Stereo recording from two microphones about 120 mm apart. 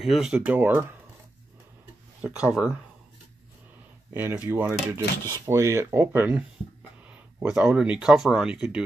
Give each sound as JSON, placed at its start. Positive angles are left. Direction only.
{"t": 0.0, "sound": "speech", "side_deg": -5}
{"t": 2.2, "sound": "speech", "side_deg": -5}
{"t": 4.1, "sound": "speech", "side_deg": -15}
{"t": 7.1, "sound": "speech", "side_deg": -5}